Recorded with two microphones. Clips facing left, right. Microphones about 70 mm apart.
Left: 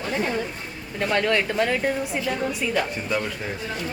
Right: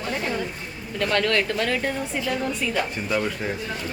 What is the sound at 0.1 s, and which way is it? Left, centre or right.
A woman's voice, centre.